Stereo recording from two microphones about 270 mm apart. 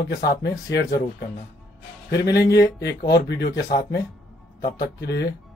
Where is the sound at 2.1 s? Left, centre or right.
Left.